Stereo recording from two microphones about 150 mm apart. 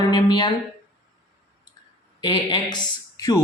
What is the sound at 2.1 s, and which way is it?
Speech, 30° left (ahead or behind).